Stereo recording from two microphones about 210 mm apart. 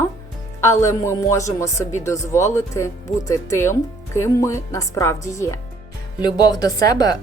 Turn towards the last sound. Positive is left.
turn(degrees=15)  # may be behind; listen again after turning